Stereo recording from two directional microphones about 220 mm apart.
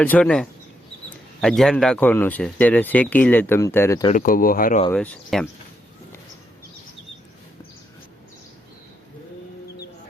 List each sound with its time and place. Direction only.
0.0 s speech: 5° left (ahead or behind)
4.1 s speech: 40° left (ahead or behind)
4.9 s speech: 5° left (ahead or behind)